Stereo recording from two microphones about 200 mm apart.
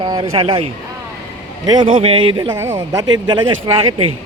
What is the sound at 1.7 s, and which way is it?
A man's voice, 25° right (ahead or behind).